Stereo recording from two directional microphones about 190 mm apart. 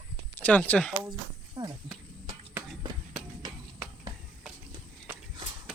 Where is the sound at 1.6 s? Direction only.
20° right (ahead or behind).